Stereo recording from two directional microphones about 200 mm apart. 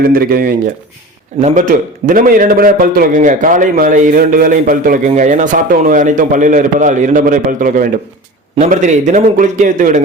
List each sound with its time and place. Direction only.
0.0 s a man's voice: 45° right (ahead or behind)